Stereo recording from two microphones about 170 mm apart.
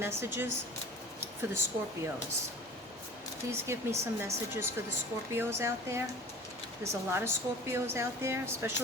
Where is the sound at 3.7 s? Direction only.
15° right (ahead or behind).